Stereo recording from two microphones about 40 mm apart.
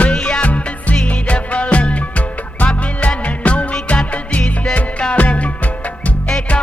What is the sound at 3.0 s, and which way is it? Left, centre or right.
Music, left.